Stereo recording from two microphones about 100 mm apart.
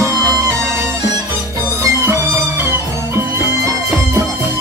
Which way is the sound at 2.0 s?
25° right (ahead or behind).